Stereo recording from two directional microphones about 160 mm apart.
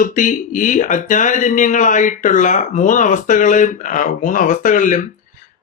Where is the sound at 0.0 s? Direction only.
55° left (ahead or behind).